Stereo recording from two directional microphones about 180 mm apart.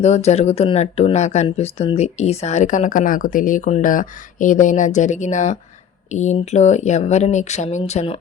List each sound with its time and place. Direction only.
0.0 s speech: 40° left (ahead or behind)